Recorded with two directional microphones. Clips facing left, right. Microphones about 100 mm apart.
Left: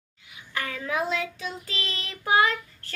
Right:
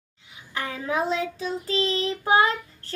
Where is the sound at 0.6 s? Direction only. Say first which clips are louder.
Right 2 dB; 25° right (ahead or behind).